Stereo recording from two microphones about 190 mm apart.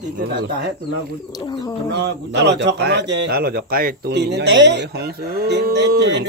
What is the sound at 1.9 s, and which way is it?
A man's voice, 65° right (ahead or behind).